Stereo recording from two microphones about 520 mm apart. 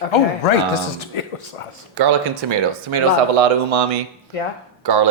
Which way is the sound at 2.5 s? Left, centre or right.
Right.